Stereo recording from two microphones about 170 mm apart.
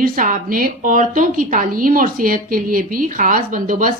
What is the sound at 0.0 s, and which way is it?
A woman's voice, 50° right (ahead or behind).